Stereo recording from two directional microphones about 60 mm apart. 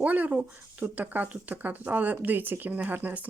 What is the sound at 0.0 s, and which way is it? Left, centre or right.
Speech, right.